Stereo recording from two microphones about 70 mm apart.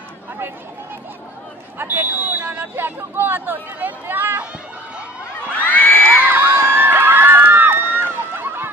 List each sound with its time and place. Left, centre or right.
1.8 s speech: right
5.6 s crowd: left
6.2 s crowd: right